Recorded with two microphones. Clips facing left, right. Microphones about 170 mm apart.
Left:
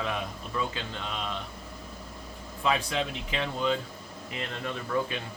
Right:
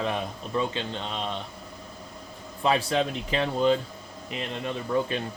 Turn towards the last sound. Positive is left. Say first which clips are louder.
# right 4 dB
turn(degrees=-20)  # may be behind; listen again after turning